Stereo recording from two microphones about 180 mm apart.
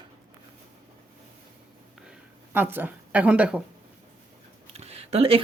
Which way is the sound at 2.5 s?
10° right (ahead or behind).